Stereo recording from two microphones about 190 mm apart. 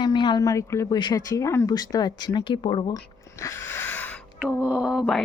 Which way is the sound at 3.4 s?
15° left (ahead or behind).